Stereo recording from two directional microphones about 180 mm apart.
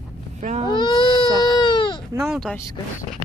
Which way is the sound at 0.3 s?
40° right (ahead or behind).